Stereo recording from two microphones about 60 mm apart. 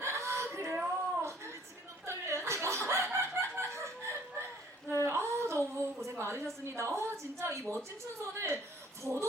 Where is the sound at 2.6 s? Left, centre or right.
Right.